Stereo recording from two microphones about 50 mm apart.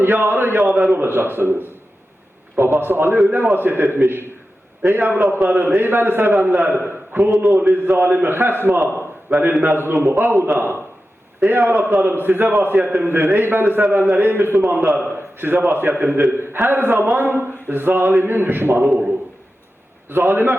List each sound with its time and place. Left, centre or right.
0.0 s a man's voice: right
0.8 s a man's voice: right
2.7 s a man's voice: right
9.3 s a man's voice: right
9.6 s a man's voice: right
20.1 s a man's voice: right